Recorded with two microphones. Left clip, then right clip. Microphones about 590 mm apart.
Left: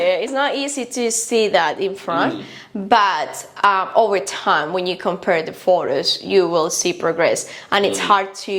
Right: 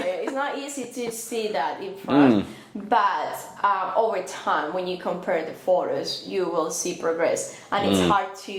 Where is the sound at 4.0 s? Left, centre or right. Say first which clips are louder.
Left 7 dB; left.